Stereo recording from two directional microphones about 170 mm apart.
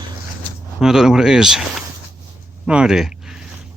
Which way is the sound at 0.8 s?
5° right (ahead or behind).